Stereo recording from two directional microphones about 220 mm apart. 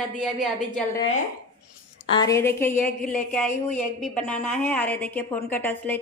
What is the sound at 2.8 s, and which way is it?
Speech, 40° left (ahead or behind).